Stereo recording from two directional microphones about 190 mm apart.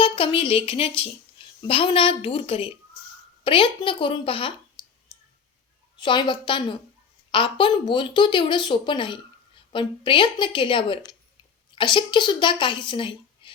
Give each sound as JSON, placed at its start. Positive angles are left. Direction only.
{"t": 0.0, "sound": "speech", "side_deg": 25}
{"t": 4.8, "sound": "clicking", "side_deg": 25}
{"t": 6.0, "sound": "a woman's voice", "side_deg": 25}